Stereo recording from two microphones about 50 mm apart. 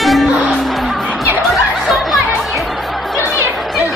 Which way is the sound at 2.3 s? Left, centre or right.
Centre.